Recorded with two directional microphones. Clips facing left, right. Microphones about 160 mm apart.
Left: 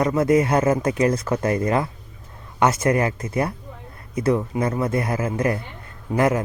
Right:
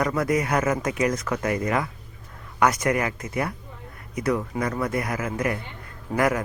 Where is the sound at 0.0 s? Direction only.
25° left (ahead or behind).